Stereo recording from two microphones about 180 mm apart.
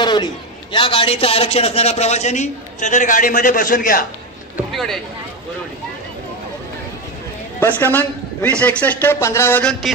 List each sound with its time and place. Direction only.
0.0 s a man's voice: 25° left (ahead or behind); by 4.0 s 50° left (ahead or behind)
4.7 s speech: centre (ahead or behind)
7.6 s a man's voice: 10° left (ahead or behind)